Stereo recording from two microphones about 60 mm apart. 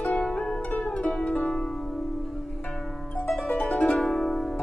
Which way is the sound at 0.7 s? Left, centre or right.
Left.